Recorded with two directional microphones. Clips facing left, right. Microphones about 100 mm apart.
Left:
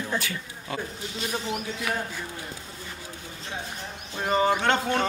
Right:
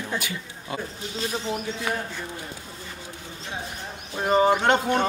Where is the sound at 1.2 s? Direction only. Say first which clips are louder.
Right 2 dB; 30° right (ahead or behind).